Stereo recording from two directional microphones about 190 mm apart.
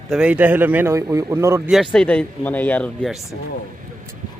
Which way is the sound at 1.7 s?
Centre (ahead or behind).